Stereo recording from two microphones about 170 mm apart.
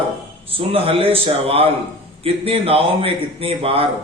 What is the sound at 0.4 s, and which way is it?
A man's voice, 35° right (ahead or behind).